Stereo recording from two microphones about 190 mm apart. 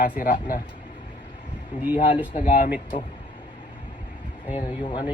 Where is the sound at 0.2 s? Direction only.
50° left (ahead or behind).